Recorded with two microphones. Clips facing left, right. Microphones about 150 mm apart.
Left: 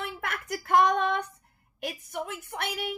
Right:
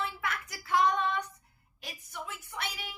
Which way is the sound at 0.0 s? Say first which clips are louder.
Left 1 dB; 55° left (ahead or behind).